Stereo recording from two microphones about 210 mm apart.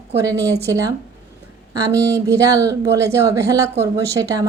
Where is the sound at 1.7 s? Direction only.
15° right (ahead or behind).